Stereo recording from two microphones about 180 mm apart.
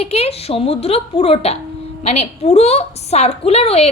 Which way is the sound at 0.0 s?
35° left (ahead or behind).